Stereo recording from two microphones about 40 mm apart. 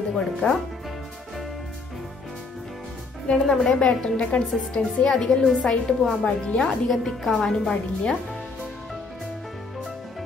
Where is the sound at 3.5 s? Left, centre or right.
Centre.